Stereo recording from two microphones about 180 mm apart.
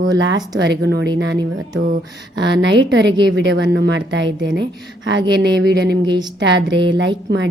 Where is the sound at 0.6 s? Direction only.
70° right (ahead or behind).